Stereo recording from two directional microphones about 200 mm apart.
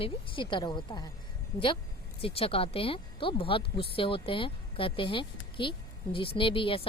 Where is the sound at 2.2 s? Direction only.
30° left (ahead or behind).